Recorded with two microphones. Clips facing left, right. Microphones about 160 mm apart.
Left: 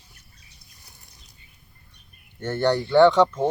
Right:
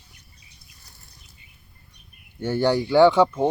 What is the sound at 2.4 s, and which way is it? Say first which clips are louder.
Speech: right 1 dB; 10° right (ahead or behind).